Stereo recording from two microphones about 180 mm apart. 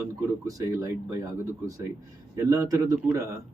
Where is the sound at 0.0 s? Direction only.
15° right (ahead or behind).